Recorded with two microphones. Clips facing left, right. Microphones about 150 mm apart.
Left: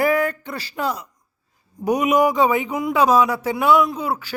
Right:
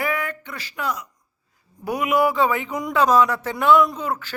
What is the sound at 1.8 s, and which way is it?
A man's voice, 20° left (ahead or behind).